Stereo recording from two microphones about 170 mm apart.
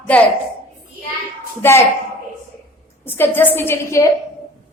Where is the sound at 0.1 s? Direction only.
10° left (ahead or behind).